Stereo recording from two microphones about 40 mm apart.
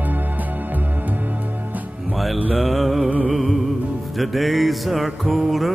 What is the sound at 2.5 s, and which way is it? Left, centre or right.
Mantra, centre.